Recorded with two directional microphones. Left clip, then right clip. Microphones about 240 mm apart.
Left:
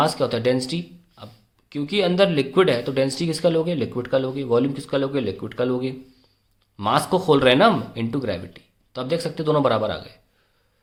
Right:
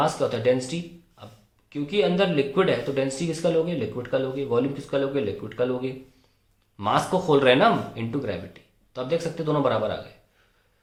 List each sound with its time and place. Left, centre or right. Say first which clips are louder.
0.0 s speech: left 2 dB; left